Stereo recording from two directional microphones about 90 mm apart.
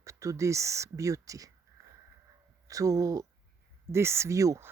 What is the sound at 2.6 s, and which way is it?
Speech, 40° right (ahead or behind).